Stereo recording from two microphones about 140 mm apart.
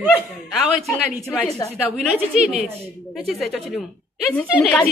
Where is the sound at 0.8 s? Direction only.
Centre (ahead or behind).